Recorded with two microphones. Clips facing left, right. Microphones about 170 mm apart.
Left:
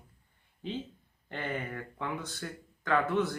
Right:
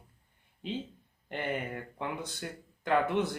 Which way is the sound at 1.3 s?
20° right (ahead or behind).